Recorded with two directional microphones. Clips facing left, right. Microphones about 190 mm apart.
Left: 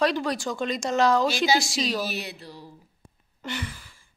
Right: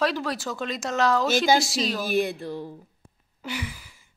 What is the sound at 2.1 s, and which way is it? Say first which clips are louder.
Speech: right 10 dB; 50° right (ahead or behind).